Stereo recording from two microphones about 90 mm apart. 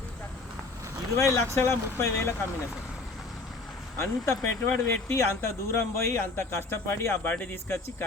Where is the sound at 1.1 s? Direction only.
35° left (ahead or behind).